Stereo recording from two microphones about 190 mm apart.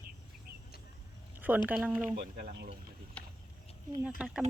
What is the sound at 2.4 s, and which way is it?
Speech, 60° right (ahead or behind).